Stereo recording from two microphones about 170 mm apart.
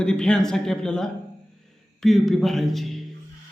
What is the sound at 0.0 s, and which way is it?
Speech, 5° left (ahead or behind).